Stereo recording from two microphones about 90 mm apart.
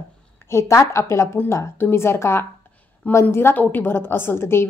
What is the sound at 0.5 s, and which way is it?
A woman's voice, 30° left (ahead or behind).